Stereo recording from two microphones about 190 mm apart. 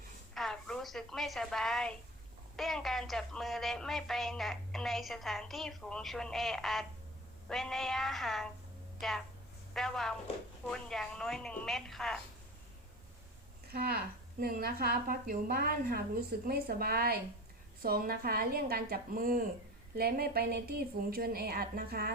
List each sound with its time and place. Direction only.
0.3 s a woman's voice: 5° left (ahead or behind)
13.7 s a woman's voice: 55° right (ahead or behind)